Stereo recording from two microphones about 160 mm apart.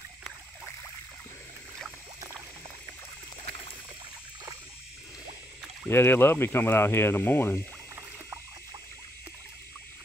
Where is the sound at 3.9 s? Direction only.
25° right (ahead or behind).